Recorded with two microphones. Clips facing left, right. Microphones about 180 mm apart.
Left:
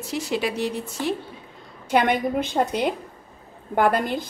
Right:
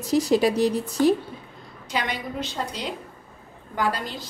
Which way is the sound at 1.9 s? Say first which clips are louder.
Left 9 dB; 55° left (ahead or behind).